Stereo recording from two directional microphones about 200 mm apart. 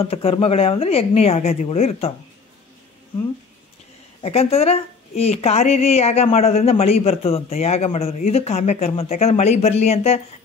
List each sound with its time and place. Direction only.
0.0 s speech: 30° left (ahead or behind)
4.2 s a woman's voice: 30° left (ahead or behind)